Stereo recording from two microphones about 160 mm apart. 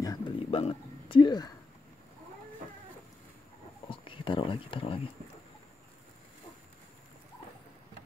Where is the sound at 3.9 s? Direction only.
35° left (ahead or behind).